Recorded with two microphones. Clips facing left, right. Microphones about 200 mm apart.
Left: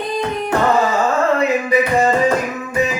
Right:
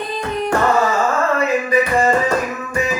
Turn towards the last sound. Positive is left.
turn(degrees=15)  # may be behind; listen again after turning